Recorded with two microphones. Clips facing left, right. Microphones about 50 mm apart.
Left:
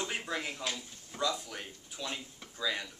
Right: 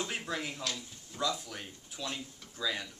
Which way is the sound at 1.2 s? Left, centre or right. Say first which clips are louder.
Left 1 dB; centre.